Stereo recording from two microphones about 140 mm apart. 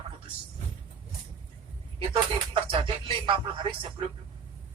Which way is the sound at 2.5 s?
40° right (ahead or behind).